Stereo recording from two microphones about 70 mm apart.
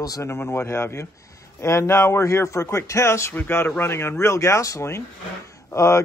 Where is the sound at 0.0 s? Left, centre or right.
Left.